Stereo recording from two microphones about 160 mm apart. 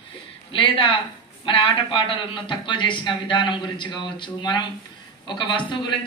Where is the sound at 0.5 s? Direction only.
35° left (ahead or behind).